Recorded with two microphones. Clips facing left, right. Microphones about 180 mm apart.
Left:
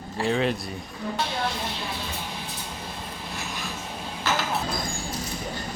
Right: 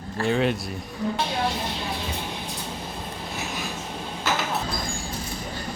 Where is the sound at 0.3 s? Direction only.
Centre (ahead or behind).